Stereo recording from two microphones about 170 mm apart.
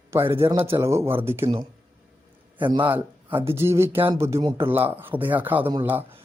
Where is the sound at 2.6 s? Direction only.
30° right (ahead or behind).